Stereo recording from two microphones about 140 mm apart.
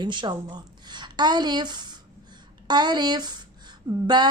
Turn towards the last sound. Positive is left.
turn(degrees=-30)  # may be behind; listen again after turning